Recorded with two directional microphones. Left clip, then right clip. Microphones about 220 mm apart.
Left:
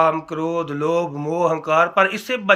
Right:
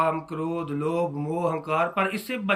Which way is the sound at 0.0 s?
10° right (ahead or behind).